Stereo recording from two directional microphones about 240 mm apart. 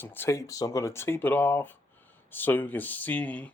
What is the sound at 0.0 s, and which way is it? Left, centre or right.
Speech, centre.